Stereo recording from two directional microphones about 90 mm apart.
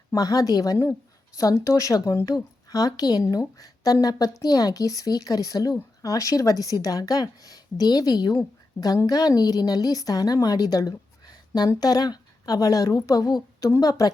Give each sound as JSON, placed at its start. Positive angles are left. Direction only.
{"t": 0.1, "sound": "a woman's voice", "side_deg": 40}